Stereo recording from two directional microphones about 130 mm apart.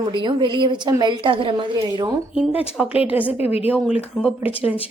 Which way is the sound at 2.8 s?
10° right (ahead or behind).